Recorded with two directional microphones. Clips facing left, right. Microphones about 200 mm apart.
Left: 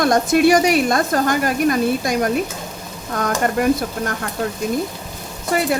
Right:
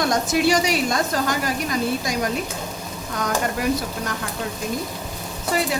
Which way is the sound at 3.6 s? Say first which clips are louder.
Left 7 dB; 55° left (ahead or behind).